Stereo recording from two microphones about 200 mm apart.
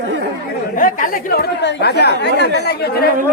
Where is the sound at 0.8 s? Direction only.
45° left (ahead or behind).